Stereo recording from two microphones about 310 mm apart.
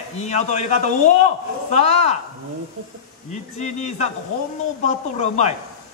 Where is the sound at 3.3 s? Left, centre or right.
Left.